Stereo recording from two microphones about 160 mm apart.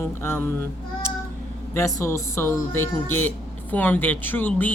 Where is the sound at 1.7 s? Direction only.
20° left (ahead or behind).